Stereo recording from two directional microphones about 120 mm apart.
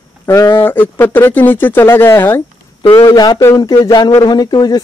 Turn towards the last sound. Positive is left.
turn(degrees=35)  # may be behind; listen again after turning